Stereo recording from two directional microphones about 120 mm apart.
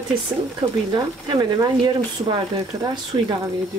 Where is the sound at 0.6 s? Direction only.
55° right (ahead or behind).